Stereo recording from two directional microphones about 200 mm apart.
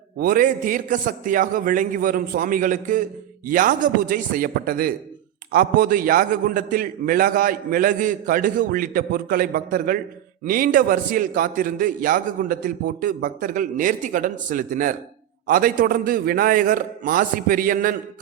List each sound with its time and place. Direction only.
0.2 s a man's voice: 45° right (ahead or behind)